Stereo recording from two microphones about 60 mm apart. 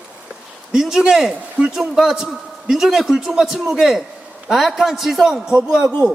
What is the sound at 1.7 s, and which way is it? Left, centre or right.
Speech, centre.